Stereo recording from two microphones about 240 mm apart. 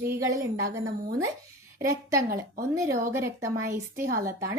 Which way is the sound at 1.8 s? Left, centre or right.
Centre.